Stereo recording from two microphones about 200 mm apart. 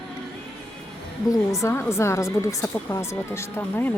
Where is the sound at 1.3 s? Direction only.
15° left (ahead or behind).